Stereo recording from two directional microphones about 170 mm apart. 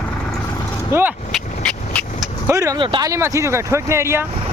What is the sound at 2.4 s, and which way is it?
Speech, 20° right (ahead or behind).